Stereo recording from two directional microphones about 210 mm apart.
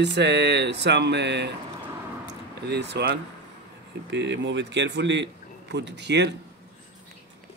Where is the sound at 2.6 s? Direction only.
55° right (ahead or behind).